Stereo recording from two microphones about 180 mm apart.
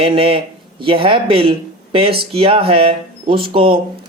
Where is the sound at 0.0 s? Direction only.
30° right (ahead or behind).